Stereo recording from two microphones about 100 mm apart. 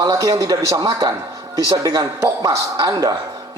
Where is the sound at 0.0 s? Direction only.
35° right (ahead or behind).